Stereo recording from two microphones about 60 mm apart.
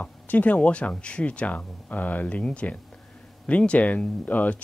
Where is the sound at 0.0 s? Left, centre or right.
Left.